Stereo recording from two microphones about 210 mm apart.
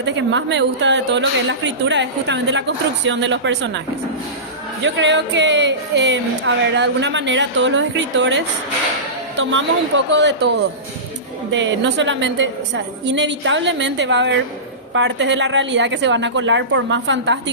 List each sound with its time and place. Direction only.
0.0 s speech: 60° right (ahead or behind)
4.8 s speech: 60° right (ahead or behind)